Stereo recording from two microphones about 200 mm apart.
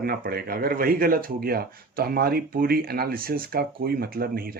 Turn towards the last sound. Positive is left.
turn(degrees=-45)  # may be behind; listen again after turning